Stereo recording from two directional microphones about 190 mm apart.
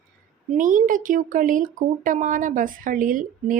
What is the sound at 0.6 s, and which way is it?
Speech, 45° right (ahead or behind).